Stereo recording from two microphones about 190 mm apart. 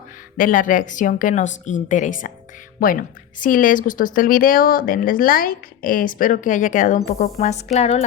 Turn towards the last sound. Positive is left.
turn(degrees=35)  # may be behind; listen again after turning